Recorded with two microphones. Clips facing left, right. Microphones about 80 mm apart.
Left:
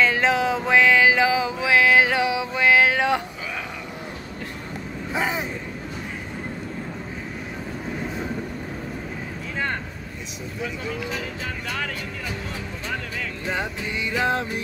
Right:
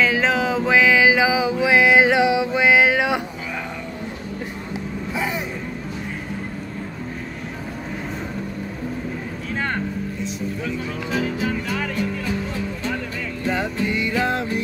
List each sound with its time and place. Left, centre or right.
0.0 s music: centre
5.1 s vehicle: left
13.6 s music: left